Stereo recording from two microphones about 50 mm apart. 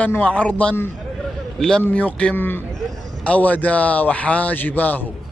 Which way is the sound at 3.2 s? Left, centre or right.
Left.